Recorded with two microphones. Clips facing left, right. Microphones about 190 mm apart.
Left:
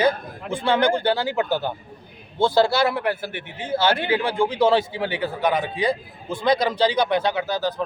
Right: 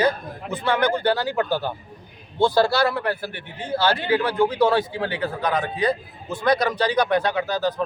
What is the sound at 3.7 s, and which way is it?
Speech, centre (ahead or behind).